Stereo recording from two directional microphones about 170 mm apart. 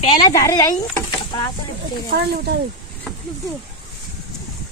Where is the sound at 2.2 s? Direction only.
70° right (ahead or behind).